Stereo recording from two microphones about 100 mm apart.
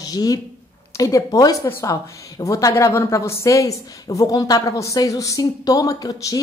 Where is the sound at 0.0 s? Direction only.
40° left (ahead or behind).